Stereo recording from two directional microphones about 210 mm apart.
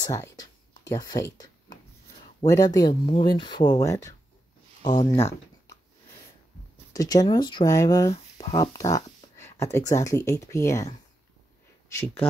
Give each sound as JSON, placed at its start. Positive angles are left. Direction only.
{"t": 0.0, "sound": "speech", "side_deg": 15}
{"t": 2.4, "sound": "speech", "side_deg": 15}
{"t": 6.9, "sound": "speech", "side_deg": 15}